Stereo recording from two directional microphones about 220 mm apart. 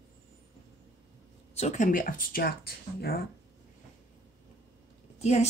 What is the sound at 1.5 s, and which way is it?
Speech, 30° left (ahead or behind).